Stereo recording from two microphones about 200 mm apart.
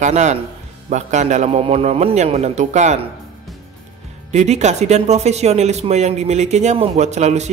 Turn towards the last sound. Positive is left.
turn(degrees=-35)  # may be behind; listen again after turning